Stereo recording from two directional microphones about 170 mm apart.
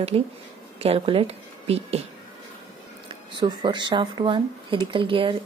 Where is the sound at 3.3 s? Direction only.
25° right (ahead or behind).